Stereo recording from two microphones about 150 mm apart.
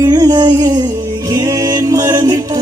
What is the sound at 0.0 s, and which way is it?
Music, 25° right (ahead or behind).